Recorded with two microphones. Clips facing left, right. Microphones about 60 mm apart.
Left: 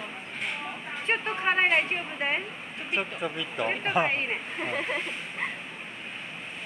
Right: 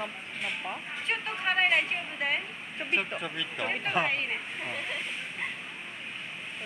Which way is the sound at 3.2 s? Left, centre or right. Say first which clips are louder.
Left 4 dB; centre.